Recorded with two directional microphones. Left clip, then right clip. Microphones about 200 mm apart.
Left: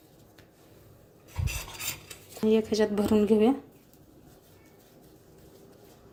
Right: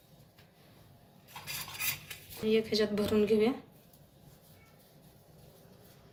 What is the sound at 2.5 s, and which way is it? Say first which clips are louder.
Speech: left 3 dB; 35° left (ahead or behind).